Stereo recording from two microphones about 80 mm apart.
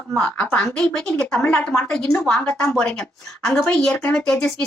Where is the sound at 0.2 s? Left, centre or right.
Centre.